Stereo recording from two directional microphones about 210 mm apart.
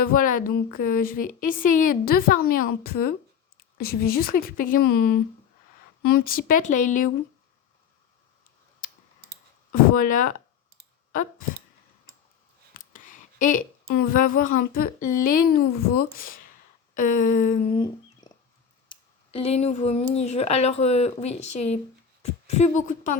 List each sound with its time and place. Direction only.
0.0 s speech: 40° left (ahead or behind)
9.7 s speech: 40° left (ahead or behind)
12.7 s speech: 40° left (ahead or behind)
17.7 s a sound: 25° left (ahead or behind)
18.9 s speech: 25° left (ahead or behind)